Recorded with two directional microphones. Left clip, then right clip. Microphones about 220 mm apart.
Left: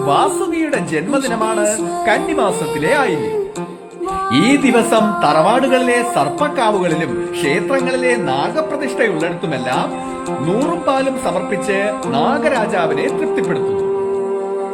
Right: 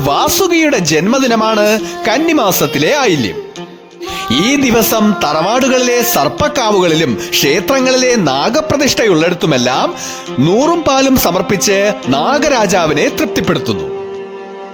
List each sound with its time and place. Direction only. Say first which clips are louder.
0.1 s speech: right 4 dB; 50° right (ahead or behind)
4.4 s speech: right 2 dB; 50° right (ahead or behind)
10.8 s speech: right 5 dB; 50° right (ahead or behind)